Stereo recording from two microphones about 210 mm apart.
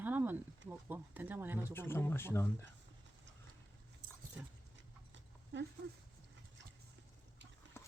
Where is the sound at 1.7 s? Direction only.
10° left (ahead or behind).